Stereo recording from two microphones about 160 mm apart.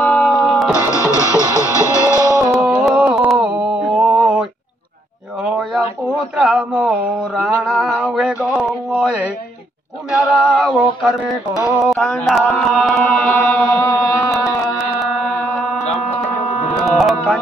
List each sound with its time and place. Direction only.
0.0 s music: 10° left (ahead or behind)
0.7 s music: 20° left (ahead or behind)
2.5 s a sound: 5° right (ahead or behind)
6.3 s a sound: 5° right (ahead or behind)
11.8 s chant: centre (ahead or behind)
16.2 s music: 5° left (ahead or behind)